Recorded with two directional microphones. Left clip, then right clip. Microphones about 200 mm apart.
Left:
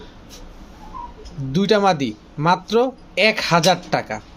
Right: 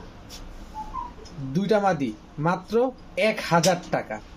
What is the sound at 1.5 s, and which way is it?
Speech, 35° left (ahead or behind).